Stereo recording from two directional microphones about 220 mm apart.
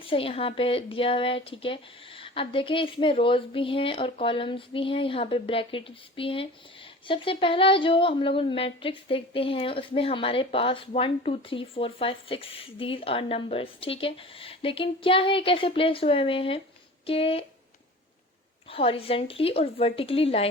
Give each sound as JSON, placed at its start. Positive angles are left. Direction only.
{"t": 0.0, "sound": "a woman's voice", "side_deg": 25}
{"t": 18.7, "sound": "a woman's voice", "side_deg": 25}